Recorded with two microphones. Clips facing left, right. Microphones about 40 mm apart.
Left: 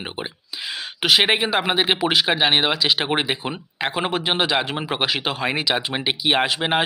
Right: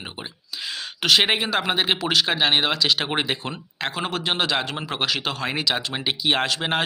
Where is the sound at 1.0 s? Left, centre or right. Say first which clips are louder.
Left 2 dB; centre.